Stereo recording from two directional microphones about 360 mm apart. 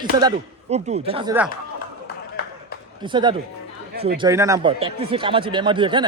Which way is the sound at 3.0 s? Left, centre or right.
Centre.